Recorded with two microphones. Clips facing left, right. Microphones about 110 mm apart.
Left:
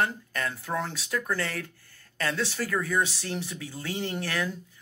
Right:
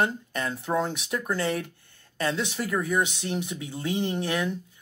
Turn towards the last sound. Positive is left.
turn(degrees=-20)  # may be behind; listen again after turning